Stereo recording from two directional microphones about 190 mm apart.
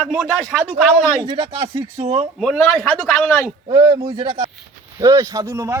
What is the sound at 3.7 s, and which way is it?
A man's voice, 20° right (ahead or behind).